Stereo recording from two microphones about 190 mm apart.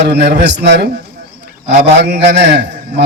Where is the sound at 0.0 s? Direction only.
60° right (ahead or behind).